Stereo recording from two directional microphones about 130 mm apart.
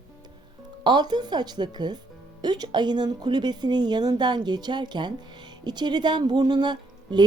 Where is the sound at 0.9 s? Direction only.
35° right (ahead or behind).